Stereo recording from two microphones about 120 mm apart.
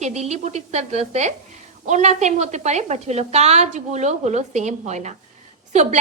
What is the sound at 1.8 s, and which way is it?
A woman's voice, 80° right.